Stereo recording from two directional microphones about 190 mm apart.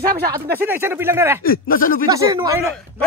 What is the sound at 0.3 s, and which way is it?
Speech, 10° right (ahead or behind).